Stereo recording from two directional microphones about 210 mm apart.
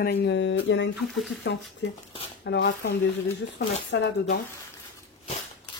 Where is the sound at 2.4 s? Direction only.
55° left (ahead or behind).